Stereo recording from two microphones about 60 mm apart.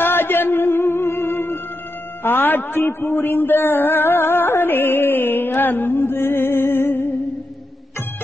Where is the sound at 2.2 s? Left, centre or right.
Left.